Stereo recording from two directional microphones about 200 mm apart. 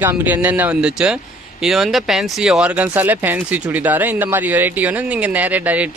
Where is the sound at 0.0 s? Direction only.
10° right (ahead or behind).